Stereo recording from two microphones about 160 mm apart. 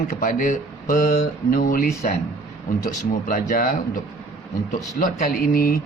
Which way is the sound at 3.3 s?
60° left (ahead or behind).